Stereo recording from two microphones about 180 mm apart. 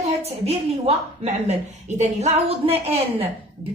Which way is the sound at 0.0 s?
35° right (ahead or behind).